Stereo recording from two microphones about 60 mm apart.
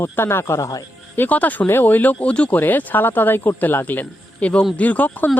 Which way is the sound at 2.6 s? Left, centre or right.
Left.